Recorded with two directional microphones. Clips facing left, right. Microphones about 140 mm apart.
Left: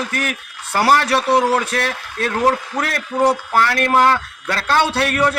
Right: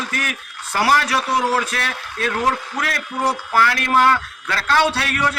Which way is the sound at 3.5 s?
35° left (ahead or behind).